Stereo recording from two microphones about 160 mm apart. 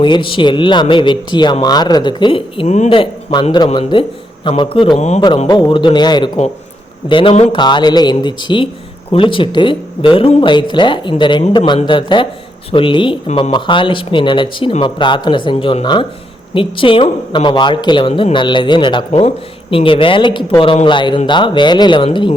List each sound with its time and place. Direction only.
0.0 s speech: 30° left (ahead or behind)
5.5 s speech: 30° left (ahead or behind)